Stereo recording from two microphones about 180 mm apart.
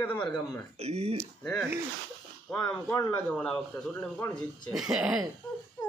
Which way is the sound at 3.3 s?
10° left (ahead or behind).